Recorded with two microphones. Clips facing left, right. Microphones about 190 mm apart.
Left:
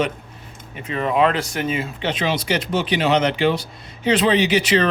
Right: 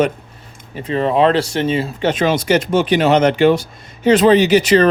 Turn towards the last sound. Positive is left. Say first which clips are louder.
# right 6 dB
turn(degrees=-45)  # may be behind; listen again after turning